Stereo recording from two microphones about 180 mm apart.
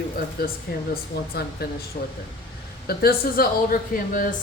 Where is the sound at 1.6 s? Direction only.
60° left (ahead or behind).